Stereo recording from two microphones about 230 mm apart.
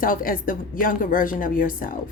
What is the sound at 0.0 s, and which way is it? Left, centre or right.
A woman's voice, left.